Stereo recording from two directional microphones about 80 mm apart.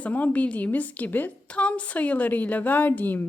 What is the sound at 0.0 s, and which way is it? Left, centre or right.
A woman's voice, centre.